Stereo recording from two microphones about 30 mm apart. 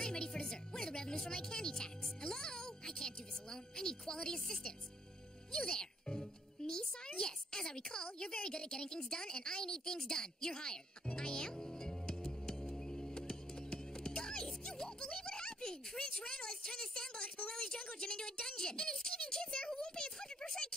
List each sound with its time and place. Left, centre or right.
0.0 s music: left
4.1 s speech: left
6.6 s music: left
7.2 s a sound: left
13.1 s music: left
15.0 s a sound: left